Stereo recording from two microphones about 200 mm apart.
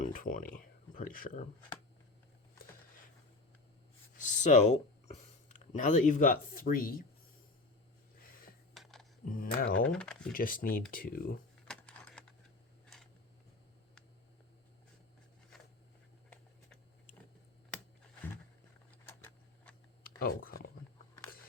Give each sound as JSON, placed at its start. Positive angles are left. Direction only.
{"t": 0.0, "sound": "speech", "side_deg": 40}
{"t": 4.2, "sound": "speech", "side_deg": 35}
{"t": 8.7, "sound": "a sound", "side_deg": 0}
{"t": 9.2, "sound": "speech", "side_deg": 45}
{"t": 9.6, "sound": "speech", "side_deg": 75}
{"t": 9.9, "sound": "speech", "side_deg": 5}
{"t": 10.3, "sound": "speech", "side_deg": 45}
{"t": 11.7, "sound": "typing", "side_deg": 5}
{"t": 19.0, "sound": "a sound", "side_deg": 10}
{"t": 20.1, "sound": "a sound", "side_deg": 45}